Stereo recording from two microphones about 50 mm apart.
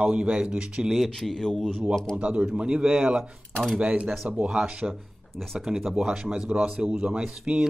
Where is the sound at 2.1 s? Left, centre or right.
Right.